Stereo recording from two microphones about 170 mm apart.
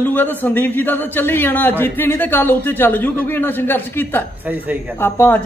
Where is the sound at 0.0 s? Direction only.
10° left (ahead or behind).